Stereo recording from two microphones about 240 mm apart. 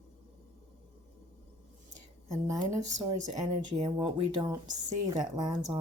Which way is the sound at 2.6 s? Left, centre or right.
Right.